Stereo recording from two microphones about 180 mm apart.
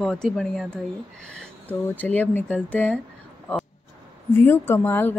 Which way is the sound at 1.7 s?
10° left (ahead or behind).